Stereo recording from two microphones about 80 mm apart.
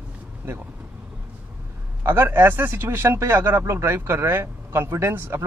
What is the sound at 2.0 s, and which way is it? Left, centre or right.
Speech, right.